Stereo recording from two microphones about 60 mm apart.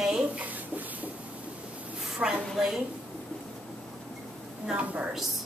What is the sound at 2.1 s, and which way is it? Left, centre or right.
Speech, right.